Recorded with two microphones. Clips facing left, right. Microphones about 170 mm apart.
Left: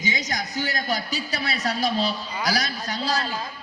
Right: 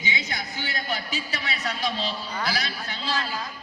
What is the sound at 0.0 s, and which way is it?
A man's voice, 40° left (ahead or behind).